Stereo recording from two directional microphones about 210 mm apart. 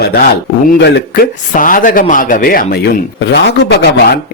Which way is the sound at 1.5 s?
40° left (ahead or behind).